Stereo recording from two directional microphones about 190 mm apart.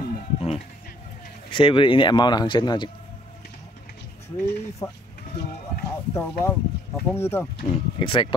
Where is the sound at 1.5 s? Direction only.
25° left (ahead or behind).